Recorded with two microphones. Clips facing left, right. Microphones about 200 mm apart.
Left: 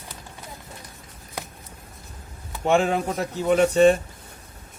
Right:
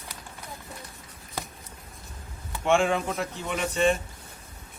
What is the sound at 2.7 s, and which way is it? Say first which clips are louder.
A man's voice: left 3 dB; 40° left (ahead or behind).